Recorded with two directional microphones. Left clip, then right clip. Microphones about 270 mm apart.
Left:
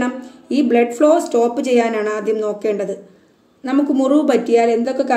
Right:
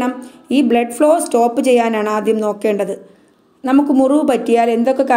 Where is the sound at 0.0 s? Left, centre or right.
Right.